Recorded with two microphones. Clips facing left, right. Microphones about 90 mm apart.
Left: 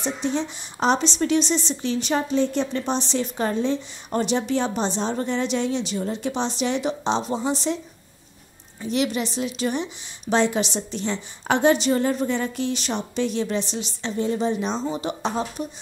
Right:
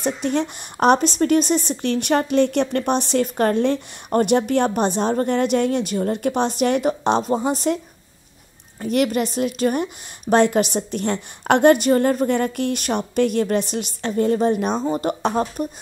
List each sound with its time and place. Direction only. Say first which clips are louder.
0.0 s speech: right 4 dB; 55° right (ahead or behind)
8.8 s speech: right 4 dB; 50° right (ahead or behind)